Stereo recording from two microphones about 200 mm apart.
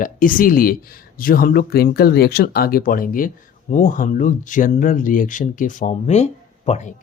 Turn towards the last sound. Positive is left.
turn(degrees=35)  # may be behind; listen again after turning